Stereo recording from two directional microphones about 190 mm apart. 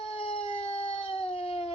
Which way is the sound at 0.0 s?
30° left (ahead or behind).